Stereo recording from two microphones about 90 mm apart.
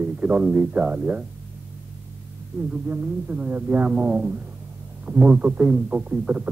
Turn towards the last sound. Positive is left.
turn(degrees=-15)  # may be behind; listen again after turning